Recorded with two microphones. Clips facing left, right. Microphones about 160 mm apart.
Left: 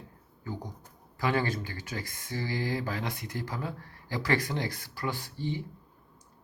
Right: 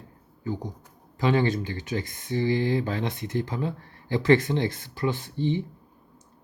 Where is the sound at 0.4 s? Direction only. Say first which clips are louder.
Right 7 dB; 20° right (ahead or behind).